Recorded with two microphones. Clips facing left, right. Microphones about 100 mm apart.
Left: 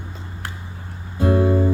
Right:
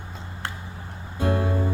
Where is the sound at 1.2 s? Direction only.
5° left (ahead or behind).